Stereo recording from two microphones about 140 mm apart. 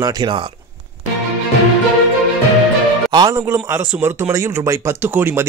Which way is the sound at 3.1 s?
25° right (ahead or behind).